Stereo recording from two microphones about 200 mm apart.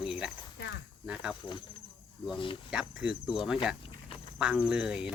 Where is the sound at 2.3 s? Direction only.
25° left (ahead or behind).